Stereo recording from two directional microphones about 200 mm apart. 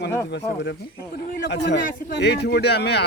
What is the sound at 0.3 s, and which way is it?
Speech, 60° left (ahead or behind).